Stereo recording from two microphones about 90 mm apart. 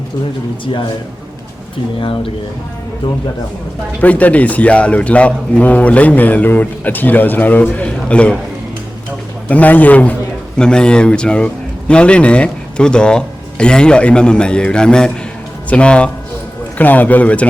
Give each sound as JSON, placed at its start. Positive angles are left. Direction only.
{"t": 0.6, "sound": "a man's voice", "side_deg": 60}
{"t": 2.0, "sound": "speech", "side_deg": 75}
{"t": 4.0, "sound": "speech", "side_deg": 15}
{"t": 9.5, "sound": "speech", "side_deg": 15}